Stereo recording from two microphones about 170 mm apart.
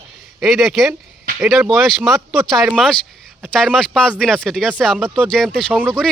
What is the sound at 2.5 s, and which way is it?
Speech, centre (ahead or behind).